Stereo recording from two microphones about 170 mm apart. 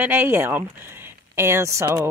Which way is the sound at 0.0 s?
10° right (ahead or behind).